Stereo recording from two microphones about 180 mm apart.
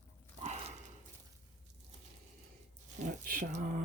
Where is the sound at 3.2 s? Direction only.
45° right (ahead or behind).